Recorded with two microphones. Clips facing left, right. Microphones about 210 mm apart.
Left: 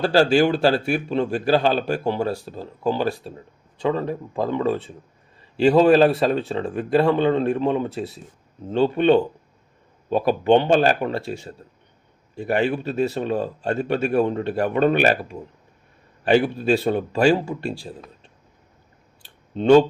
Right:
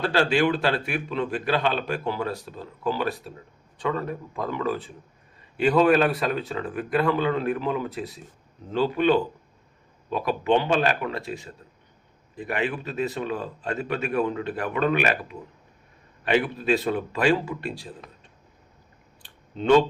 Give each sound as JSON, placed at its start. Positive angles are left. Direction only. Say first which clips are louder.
{"t": 0.0, "sound": "a man's voice", "louder": "left 5 dB", "side_deg": 35}
{"t": 12.4, "sound": "a man's voice", "louder": "left 6 dB", "side_deg": 30}